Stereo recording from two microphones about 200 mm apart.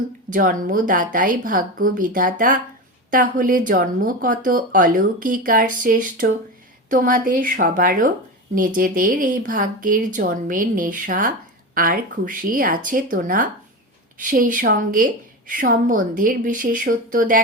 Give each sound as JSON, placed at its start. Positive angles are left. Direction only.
{"t": 0.3, "sound": "speech", "side_deg": -45}